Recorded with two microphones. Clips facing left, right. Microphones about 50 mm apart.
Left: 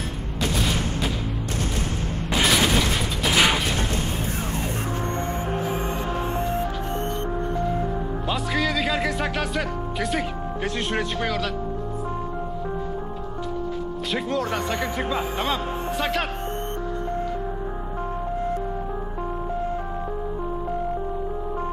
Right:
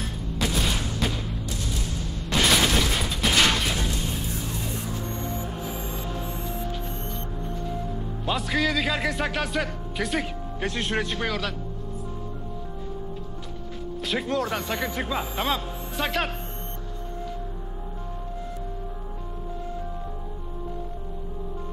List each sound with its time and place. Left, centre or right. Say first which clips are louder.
0.4 s boom: left 2 dB; centre
2.3 s a sound: left 1 dB; centre
3.3 s a sound: left 2 dB; centre
5.5 s music: left 7 dB; left
8.3 s speech: right 1 dB; centre
14.1 s speech: left 1 dB; centre